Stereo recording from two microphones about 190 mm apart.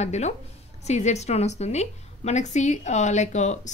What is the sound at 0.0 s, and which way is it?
A woman's voice, 35° left (ahead or behind).